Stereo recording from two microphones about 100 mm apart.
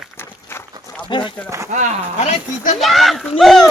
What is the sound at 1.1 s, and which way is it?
Speech, 50° left (ahead or behind).